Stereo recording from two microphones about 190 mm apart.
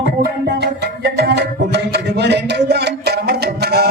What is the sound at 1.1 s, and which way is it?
Music, 60° right (ahead or behind).